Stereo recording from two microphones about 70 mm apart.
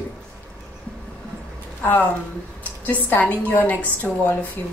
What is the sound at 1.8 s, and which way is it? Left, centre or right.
A woman's voice, left.